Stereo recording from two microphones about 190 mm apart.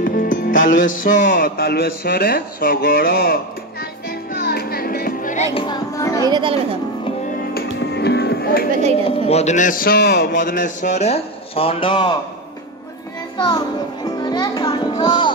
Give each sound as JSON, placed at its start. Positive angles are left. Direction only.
{"t": 0.0, "sound": "music", "side_deg": 45}
{"t": 5.5, "sound": "music", "side_deg": 25}
{"t": 6.2, "sound": "a woman's voice", "side_deg": -25}
{"t": 7.9, "sound": "music", "side_deg": 60}
{"t": 9.0, "sound": "a man's voice", "side_deg": 35}
{"t": 14.0, "sound": "music", "side_deg": 20}